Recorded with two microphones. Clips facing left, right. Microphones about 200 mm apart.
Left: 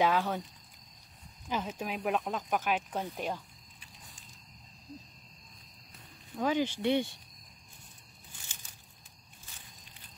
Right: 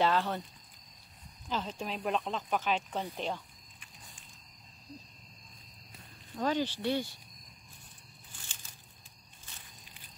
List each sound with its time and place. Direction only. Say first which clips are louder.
0.0 s speech: left 1 dB; 10° left (ahead or behind)
1.5 s speech: left 1 dB; 10° left (ahead or behind)
6.3 s speech: left 1 dB; 10° left (ahead or behind)